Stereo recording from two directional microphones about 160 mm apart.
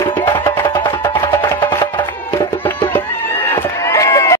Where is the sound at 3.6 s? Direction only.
15° left (ahead or behind).